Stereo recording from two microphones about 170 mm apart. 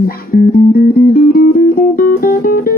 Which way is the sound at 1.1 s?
60° left (ahead or behind).